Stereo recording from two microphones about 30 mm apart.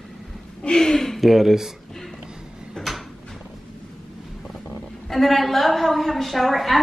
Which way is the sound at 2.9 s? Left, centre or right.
Centre.